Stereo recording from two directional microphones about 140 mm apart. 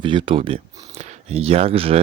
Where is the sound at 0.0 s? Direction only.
35° right (ahead or behind).